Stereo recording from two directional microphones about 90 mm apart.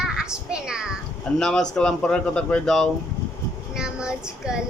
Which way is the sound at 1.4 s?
5° left (ahead or behind).